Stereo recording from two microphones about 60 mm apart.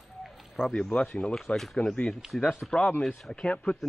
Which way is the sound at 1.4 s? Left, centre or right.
Centre.